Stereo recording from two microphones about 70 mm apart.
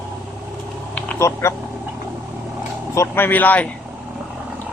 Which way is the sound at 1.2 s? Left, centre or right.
Left.